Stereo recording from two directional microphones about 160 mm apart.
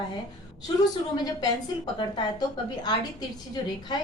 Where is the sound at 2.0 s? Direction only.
25° left (ahead or behind).